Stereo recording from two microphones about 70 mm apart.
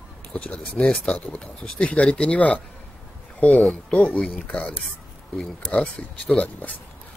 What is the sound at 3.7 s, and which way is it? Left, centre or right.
Speech, centre.